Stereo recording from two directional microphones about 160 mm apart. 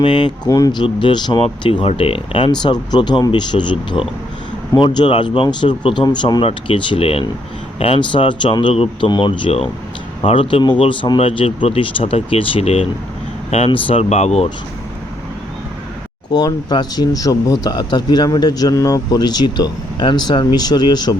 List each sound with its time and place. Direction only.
0.0 s speech: 30° left (ahead or behind)
16.3 s speech: 25° left (ahead or behind)